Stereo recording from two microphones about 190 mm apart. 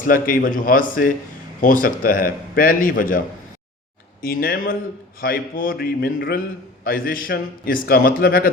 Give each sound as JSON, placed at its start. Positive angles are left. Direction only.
{"t": 0.0, "sound": "a man's voice", "side_deg": 45}
{"t": 4.2, "sound": "a man's voice", "side_deg": 50}